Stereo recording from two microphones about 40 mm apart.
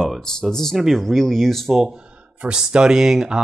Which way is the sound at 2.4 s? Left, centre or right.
Right.